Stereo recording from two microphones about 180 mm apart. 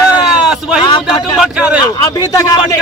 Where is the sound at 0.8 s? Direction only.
25° left (ahead or behind).